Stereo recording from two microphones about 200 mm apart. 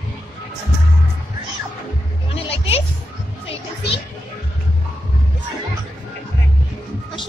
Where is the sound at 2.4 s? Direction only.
30° left (ahead or behind).